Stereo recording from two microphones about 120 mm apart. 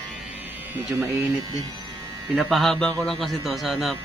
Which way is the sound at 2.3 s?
Centre (ahead or behind).